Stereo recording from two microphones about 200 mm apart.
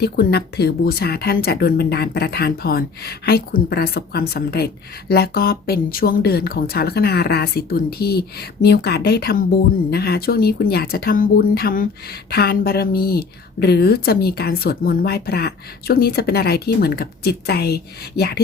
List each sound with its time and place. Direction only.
0.0 s speech: 50° left (ahead or behind)